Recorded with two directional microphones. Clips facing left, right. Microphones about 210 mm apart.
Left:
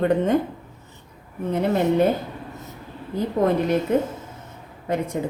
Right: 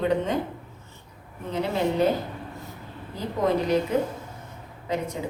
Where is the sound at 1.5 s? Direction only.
55° left (ahead or behind).